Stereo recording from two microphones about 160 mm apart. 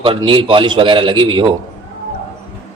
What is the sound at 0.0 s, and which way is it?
A man's voice, 30° right (ahead or behind).